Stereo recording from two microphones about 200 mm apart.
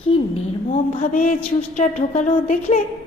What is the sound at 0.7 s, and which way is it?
A woman's voice, 35° left (ahead or behind).